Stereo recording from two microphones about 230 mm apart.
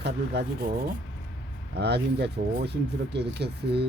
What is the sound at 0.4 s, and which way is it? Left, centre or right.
Speech, right.